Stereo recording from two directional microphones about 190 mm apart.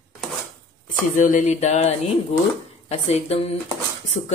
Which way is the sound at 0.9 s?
45° left (ahead or behind).